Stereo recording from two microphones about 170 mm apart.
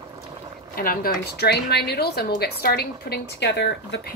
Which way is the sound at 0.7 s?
60° left (ahead or behind).